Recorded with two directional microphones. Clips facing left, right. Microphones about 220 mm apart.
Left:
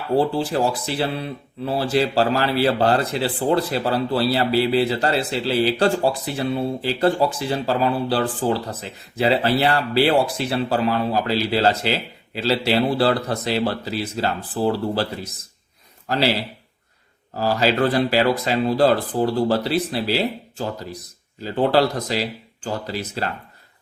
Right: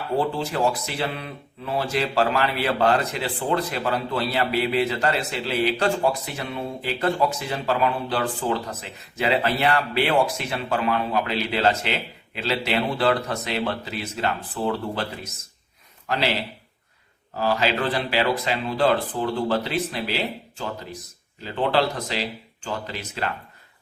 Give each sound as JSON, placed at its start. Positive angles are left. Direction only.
{"t": 0.2, "sound": "speech", "side_deg": 35}
{"t": 17.3, "sound": "speech", "side_deg": 40}